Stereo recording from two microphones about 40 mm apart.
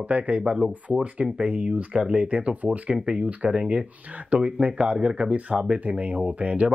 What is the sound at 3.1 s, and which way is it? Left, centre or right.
Speech, right.